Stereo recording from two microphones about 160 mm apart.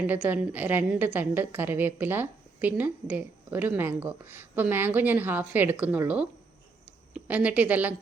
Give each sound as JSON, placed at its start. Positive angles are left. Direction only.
{"t": 0.1, "sound": "a woman's voice", "side_deg": -10}